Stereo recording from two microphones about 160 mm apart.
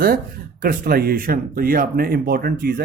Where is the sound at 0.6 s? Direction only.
65° right (ahead or behind).